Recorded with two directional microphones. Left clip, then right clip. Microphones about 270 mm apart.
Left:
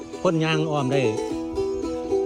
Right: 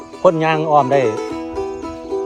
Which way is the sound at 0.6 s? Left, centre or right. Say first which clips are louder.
Right 10 dB; centre.